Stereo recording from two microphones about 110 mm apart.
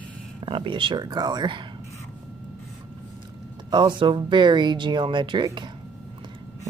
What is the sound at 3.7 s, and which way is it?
Speech, 45° right (ahead or behind).